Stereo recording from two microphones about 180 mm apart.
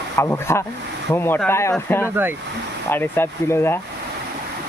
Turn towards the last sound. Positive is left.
turn(degrees=15)  # may be behind; listen again after turning